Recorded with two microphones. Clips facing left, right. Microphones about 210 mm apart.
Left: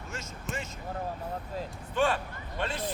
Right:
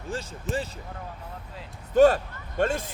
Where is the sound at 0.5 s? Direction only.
Centre (ahead or behind).